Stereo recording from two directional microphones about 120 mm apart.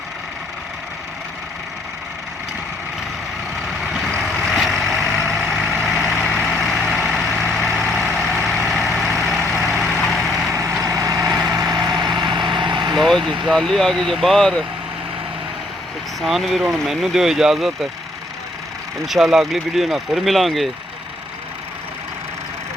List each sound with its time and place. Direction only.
3.7 s vehicle: centre (ahead or behind)
10.5 s vehicle: 25° right (ahead or behind)
13.0 s vehicle: centre (ahead or behind)
13.6 s speech: 5° left (ahead or behind)
16.2 s speech: centre (ahead or behind)
19.0 s speech: centre (ahead or behind)